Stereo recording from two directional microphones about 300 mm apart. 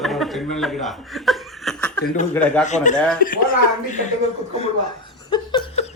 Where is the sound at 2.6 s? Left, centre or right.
Left.